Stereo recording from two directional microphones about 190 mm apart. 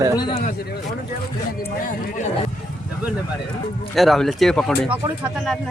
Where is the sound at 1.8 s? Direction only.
45° left (ahead or behind).